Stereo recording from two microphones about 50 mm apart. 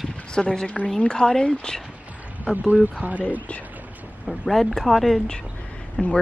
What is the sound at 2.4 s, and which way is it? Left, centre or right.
Speech, right.